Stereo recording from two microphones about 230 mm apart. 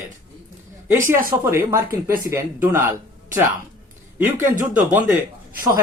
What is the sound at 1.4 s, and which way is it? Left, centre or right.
Speech, centre.